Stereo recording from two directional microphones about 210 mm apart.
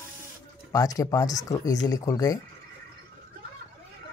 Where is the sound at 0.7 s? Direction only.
15° left (ahead or behind).